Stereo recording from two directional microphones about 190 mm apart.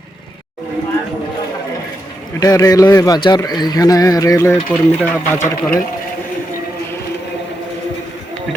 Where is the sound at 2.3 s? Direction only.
15° left (ahead or behind).